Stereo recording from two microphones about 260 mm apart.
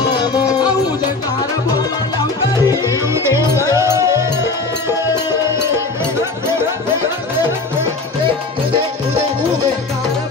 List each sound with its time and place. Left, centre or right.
0.2 s music: centre
2.5 s music: centre
3.1 s music: centre